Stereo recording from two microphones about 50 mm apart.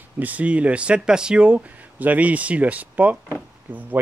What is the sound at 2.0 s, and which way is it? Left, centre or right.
A man's voice, right.